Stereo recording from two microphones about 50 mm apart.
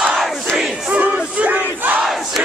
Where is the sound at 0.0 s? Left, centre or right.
Centre.